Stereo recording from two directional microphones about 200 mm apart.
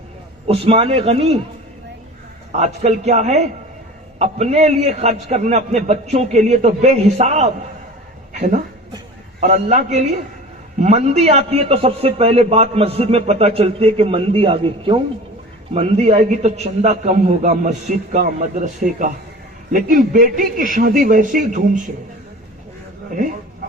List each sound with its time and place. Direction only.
0.4 s a man's voice: 30° right (ahead or behind)
2.5 s a man's voice: 35° right (ahead or behind)